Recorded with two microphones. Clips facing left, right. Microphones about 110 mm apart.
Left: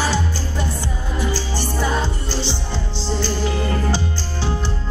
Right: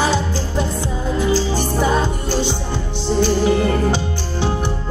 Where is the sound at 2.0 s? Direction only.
50° right (ahead or behind).